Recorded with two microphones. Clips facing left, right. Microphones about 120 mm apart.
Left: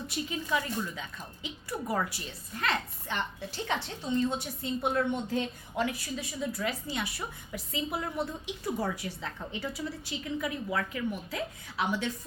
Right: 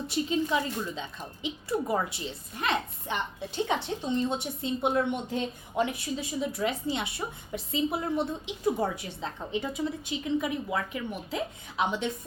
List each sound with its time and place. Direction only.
0.1 s a woman's voice: 25° right (ahead or behind)